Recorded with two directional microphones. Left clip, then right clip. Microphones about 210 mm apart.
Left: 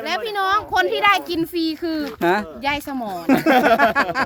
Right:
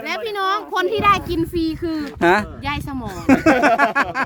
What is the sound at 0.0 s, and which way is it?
Speech, 5° right (ahead or behind).